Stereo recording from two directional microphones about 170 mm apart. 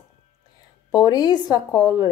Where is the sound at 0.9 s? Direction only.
25° left (ahead or behind).